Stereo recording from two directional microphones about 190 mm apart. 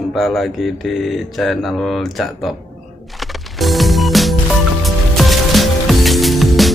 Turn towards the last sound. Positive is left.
turn(degrees=0)  # may be behind; listen again after turning